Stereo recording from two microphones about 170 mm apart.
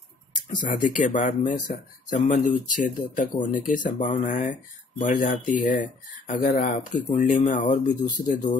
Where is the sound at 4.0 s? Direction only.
50° left (ahead or behind).